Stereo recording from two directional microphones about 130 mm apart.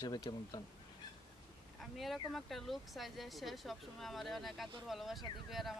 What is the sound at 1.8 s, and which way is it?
Speech, centre (ahead or behind).